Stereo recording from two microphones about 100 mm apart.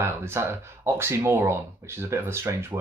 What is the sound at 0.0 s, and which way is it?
Speech, 25° right (ahead or behind).